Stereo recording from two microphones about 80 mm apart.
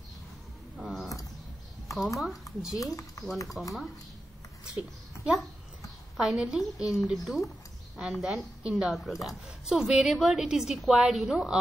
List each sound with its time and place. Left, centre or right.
0.7 s typing: centre
2.1 s speech: centre
2.8 s speech: left
3.6 s a woman's voice: centre